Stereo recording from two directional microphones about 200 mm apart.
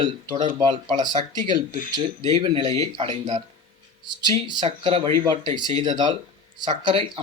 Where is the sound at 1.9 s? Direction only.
25° right (ahead or behind).